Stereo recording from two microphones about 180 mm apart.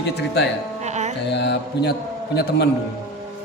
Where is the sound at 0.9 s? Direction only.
40° right (ahead or behind).